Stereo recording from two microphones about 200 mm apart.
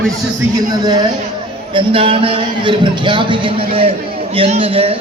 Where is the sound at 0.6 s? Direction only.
20° right (ahead or behind).